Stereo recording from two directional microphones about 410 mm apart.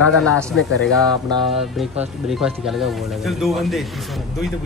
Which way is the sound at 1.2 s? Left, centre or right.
Centre.